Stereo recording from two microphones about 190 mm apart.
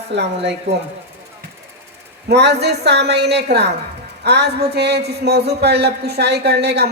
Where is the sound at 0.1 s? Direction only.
65° right (ahead or behind).